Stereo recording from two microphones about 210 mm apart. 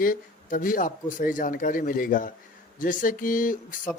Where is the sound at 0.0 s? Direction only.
40° left (ahead or behind).